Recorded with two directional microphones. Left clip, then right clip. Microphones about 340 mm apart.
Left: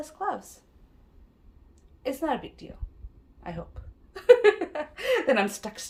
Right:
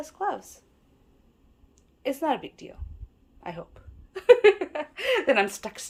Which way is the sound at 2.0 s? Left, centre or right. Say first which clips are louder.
Right 2 dB; centre.